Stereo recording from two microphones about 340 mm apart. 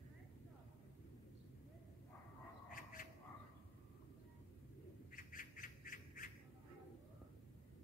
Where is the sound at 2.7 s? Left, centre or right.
Left.